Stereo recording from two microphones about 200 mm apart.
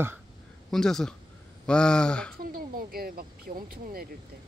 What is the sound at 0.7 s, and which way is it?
Speech, centre (ahead or behind).